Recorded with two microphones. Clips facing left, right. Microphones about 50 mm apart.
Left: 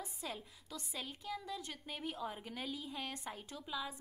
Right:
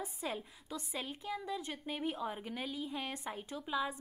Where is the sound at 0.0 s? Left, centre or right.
Right.